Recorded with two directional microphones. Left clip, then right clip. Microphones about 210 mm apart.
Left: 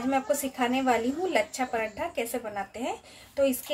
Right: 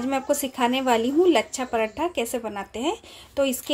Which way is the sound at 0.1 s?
45° right (ahead or behind).